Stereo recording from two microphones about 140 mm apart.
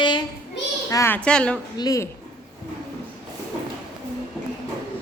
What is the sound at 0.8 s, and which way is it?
Speech, 20° left (ahead or behind).